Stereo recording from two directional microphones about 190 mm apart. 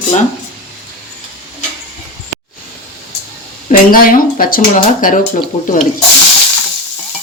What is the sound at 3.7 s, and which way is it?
Speech, 50° left (ahead or behind).